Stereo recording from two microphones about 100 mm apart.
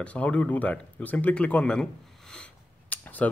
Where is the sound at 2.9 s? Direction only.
15° left (ahead or behind).